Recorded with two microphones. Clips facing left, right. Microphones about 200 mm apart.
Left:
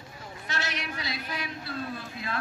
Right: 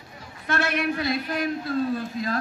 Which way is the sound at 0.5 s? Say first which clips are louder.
Right 11 dB; 55° right (ahead or behind).